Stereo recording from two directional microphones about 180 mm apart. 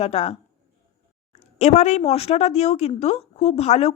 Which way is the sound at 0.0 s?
35° left (ahead or behind).